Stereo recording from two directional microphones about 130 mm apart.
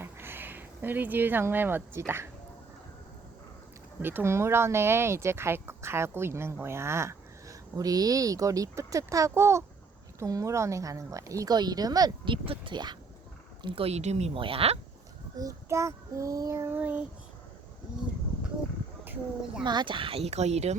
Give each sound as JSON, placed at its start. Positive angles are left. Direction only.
{"t": 0.0, "sound": "speech", "side_deg": -15}
{"t": 4.0, "sound": "speech", "side_deg": -15}
{"t": 15.4, "sound": "speech", "side_deg": -25}
{"t": 19.0, "sound": "speech", "side_deg": -15}
{"t": 19.6, "sound": "speech", "side_deg": -35}